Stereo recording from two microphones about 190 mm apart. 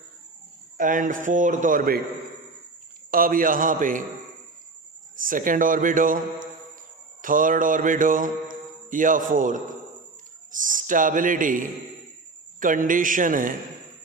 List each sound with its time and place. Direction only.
0.8 s a man's voice: 45° right (ahead or behind)
3.1 s a man's voice: 50° right (ahead or behind)
5.1 s a man's voice: 45° right (ahead or behind)
7.2 s mantra: 45° right (ahead or behind)
9.3 s a man's voice: 45° right (ahead or behind)
10.6 s a man's voice: 45° right (ahead or behind)